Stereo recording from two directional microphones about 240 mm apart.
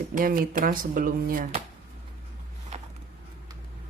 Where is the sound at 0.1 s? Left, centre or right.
Right.